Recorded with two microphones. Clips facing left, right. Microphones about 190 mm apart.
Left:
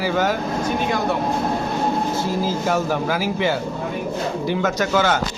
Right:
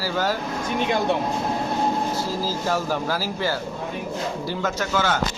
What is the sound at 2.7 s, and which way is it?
Speech, 15° left (ahead or behind).